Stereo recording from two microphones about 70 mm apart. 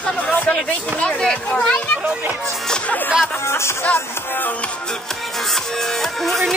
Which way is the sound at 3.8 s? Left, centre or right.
Left.